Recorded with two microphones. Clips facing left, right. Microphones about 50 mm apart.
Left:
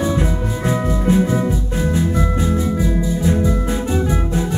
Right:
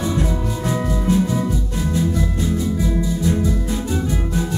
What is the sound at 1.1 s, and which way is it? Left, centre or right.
Music, left.